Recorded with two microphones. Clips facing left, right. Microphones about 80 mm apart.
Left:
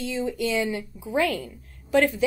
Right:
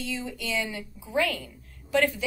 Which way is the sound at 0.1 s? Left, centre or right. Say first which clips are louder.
Left 7 dB; left.